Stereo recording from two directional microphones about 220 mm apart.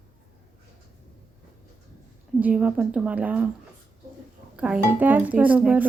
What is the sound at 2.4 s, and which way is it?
A woman's voice, 5° right (ahead or behind).